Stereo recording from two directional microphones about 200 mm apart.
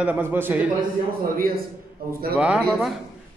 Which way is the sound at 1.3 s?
45° right (ahead or behind).